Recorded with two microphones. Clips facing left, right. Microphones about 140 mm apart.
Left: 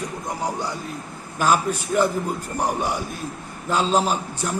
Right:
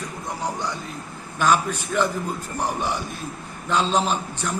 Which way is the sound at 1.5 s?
40° left (ahead or behind).